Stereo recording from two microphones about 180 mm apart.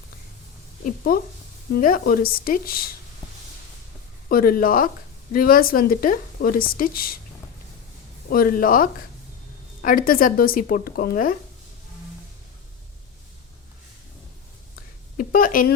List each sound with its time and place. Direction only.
1.1 s a woman's voice: 50° left (ahead or behind)
4.3 s a woman's voice: 55° left (ahead or behind)
8.3 s a woman's voice: 50° left (ahead or behind)
15.2 s a woman's voice: 50° left (ahead or behind)